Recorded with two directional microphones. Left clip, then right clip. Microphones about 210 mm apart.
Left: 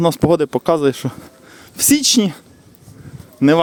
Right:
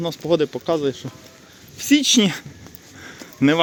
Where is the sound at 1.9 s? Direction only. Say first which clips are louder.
Left 1 dB; 35° left (ahead or behind).